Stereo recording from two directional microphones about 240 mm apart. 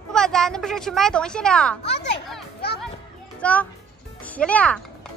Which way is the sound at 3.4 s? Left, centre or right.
Centre.